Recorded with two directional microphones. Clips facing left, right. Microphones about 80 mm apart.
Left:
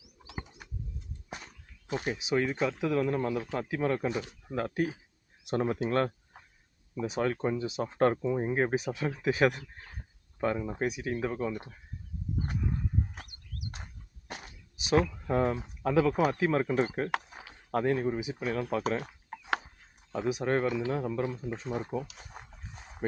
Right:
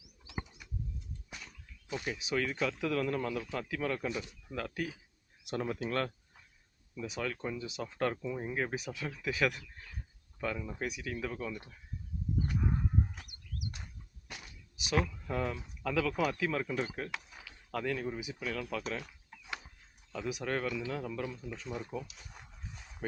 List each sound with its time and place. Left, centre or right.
1.9 s speech: left
2.1 s speech: left
13.1 s a sound: left
17.2 s speech: left
20.1 s speech: left
22.0 s dog: left